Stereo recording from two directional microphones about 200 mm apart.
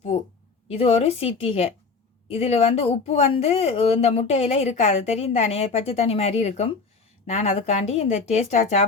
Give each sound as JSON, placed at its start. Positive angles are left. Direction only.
{"t": 0.7, "sound": "speech", "side_deg": 30}